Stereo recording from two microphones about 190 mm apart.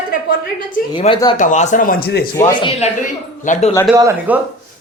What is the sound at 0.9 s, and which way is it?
Speech, 25° left (ahead or behind).